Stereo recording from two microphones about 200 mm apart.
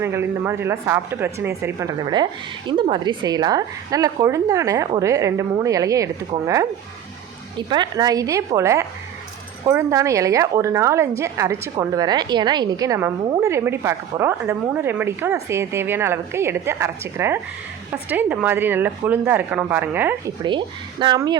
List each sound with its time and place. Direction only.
0.0 s a woman's voice: 10° right (ahead or behind)
7.7 s a woman's voice: 20° right (ahead or behind)
20.4 s speech: 25° right (ahead or behind)